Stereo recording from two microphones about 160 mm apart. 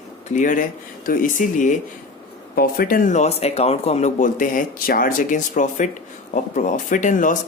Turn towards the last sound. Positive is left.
turn(degrees=55)  # may be behind; listen again after turning